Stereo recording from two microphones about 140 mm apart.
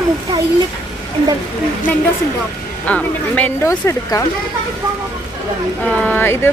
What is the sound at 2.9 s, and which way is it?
Speech, 10° left (ahead or behind).